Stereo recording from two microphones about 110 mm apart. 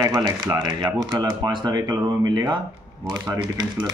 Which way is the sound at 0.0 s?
30° right (ahead or behind).